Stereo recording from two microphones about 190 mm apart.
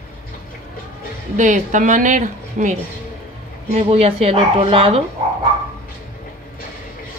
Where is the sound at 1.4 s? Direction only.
40° right (ahead or behind).